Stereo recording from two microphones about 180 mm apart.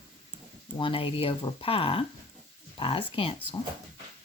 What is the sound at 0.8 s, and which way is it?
Speech, 30° left (ahead or behind).